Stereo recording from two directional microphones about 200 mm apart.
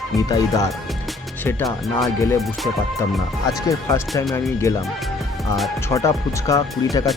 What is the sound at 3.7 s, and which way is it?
Speech, 15° left (ahead or behind).